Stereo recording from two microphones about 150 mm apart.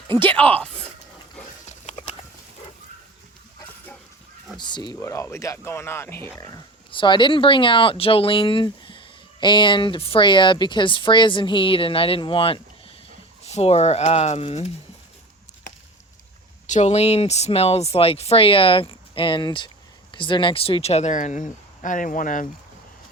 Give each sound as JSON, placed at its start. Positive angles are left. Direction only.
{"t": 0.1, "sound": "speech", "side_deg": 15}
{"t": 1.9, "sound": "horse", "side_deg": 50}
{"t": 4.5, "sound": "speech", "side_deg": 30}
{"t": 4.9, "sound": "speech", "side_deg": 20}
{"t": 6.9, "sound": "speech", "side_deg": 30}
{"t": 16.6, "sound": "speech", "side_deg": 50}